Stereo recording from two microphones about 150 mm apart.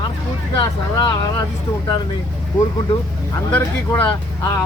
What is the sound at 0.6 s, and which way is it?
Speech, 30° left (ahead or behind).